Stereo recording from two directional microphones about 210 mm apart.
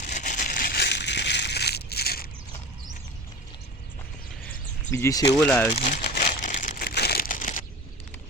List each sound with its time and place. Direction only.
0.0 s crushing: 35° left (ahead or behind)
4.9 s speech: 15° left (ahead or behind)
5.7 s crumpling: 35° left (ahead or behind)